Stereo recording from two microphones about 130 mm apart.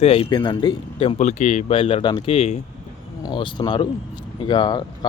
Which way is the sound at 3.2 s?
35° left (ahead or behind).